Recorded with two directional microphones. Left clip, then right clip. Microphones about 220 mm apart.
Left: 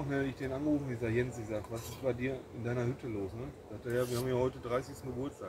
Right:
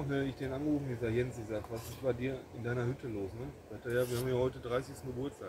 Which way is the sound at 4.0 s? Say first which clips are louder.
Even; 5° left (ahead or behind).